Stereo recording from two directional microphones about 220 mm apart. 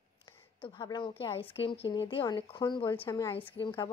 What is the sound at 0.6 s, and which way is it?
Speech, 20° left (ahead or behind).